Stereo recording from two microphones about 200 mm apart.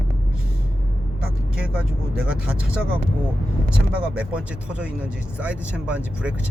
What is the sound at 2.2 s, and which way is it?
Speech, 5° right (ahead or behind).